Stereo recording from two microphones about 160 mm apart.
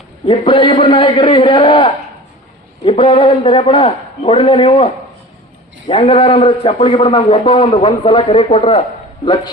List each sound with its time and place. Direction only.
0.3 s a man's voice: 30° left (ahead or behind)
5.9 s a man's voice: 35° left (ahead or behind)